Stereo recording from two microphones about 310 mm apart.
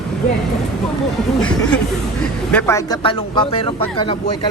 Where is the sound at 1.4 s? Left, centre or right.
Centre.